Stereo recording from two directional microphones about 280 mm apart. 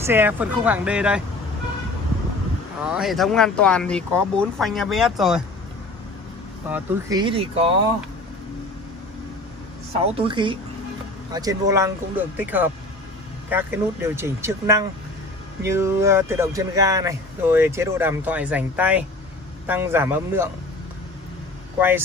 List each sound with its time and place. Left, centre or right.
0.0 s speech: centre
2.8 s speech: centre
6.7 s speech: centre
10.1 s speech: centre
21.7 s speech: centre